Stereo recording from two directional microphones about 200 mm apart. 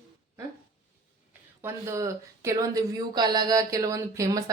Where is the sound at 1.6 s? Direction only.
15° right (ahead or behind).